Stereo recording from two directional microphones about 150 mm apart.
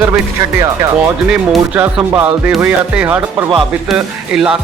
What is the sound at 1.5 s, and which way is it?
Speech, 10° right (ahead or behind).